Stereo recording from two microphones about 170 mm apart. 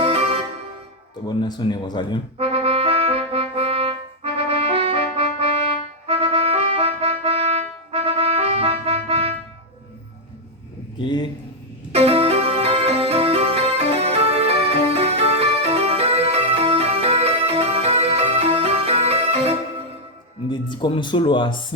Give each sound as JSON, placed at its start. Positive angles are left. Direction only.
{"t": 0.0, "sound": "music", "side_deg": -35}
{"t": 1.3, "sound": "a man's voice", "side_deg": 25}
{"t": 2.4, "sound": "music", "side_deg": -35}
{"t": 10.9, "sound": "a sound", "side_deg": 30}
{"t": 11.9, "sound": "music", "side_deg": -35}
{"t": 20.5, "sound": "a sound", "side_deg": 30}